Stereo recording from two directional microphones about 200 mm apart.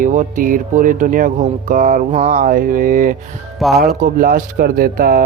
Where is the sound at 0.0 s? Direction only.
40° right (ahead or behind).